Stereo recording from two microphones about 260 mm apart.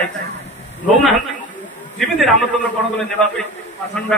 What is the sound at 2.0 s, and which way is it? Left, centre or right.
A man's voice, centre.